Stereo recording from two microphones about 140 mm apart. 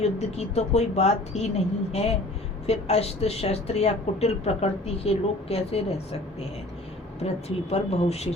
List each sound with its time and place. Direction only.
0.0 s speech: 50° left (ahead or behind)
7.2 s speech: 50° left (ahead or behind)